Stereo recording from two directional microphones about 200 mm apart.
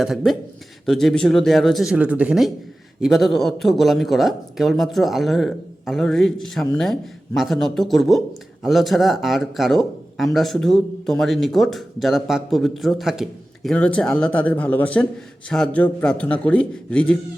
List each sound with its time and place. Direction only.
0.0 s a man's voice: centre (ahead or behind)